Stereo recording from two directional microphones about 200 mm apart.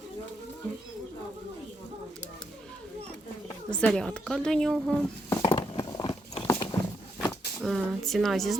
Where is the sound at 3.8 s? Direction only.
5° left (ahead or behind).